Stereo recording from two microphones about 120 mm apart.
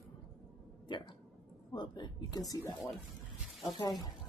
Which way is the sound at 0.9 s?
45° left (ahead or behind).